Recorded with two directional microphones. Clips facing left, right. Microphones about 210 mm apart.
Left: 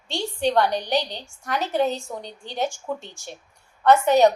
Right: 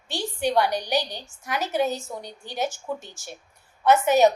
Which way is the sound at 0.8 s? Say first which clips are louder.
Left 2 dB; 15° left (ahead or behind).